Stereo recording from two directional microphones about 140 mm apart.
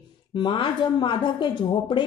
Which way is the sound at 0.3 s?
35° left (ahead or behind).